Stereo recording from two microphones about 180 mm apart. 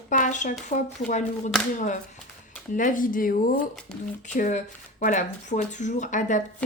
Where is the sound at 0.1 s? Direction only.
45° left (ahead or behind).